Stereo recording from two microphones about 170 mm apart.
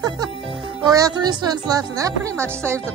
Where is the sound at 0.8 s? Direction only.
20° right (ahead or behind).